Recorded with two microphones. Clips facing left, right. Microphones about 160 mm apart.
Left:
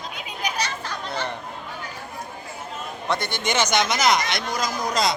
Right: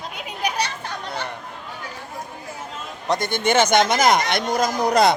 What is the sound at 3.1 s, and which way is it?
Speech, 50° right (ahead or behind).